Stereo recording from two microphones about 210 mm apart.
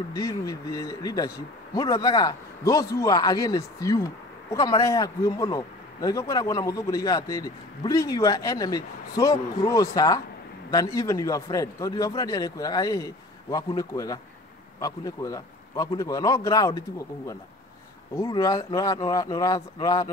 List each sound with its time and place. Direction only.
0.1 s speech: 15° left (ahead or behind)
18.1 s speech: 15° left (ahead or behind)